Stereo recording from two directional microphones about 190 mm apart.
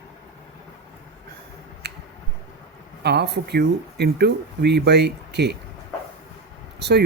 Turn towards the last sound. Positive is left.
turn(degrees=-60)  # may be behind; listen again after turning